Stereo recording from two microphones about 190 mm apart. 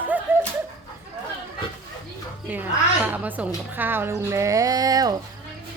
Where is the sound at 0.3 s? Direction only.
10° right (ahead or behind).